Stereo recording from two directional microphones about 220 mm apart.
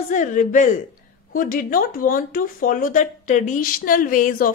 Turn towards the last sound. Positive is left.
turn(degrees=40)  # may be behind; listen again after turning